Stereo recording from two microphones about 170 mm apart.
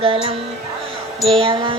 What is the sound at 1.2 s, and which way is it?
Music, 30° right (ahead or behind).